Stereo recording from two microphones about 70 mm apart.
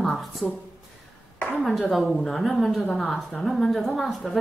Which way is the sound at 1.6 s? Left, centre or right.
Centre.